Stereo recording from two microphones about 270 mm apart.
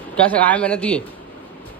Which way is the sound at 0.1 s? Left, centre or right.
Centre.